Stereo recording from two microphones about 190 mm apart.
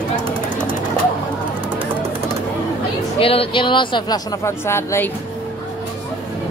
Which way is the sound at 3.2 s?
30° left (ahead or behind).